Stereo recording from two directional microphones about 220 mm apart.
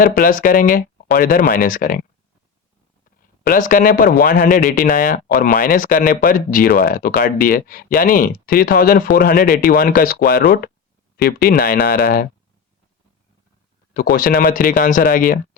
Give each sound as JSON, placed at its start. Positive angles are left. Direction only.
{"t": 0.0, "sound": "speech", "side_deg": 40}
{"t": 3.4, "sound": "speech", "side_deg": 40}
{"t": 13.9, "sound": "speech", "side_deg": 45}